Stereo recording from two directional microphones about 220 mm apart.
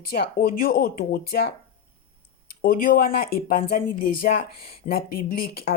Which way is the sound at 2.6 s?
40° left (ahead or behind).